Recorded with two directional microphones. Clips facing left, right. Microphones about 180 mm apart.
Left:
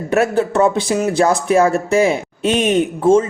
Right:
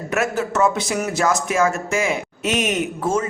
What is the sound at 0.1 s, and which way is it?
Speech, 30° left (ahead or behind).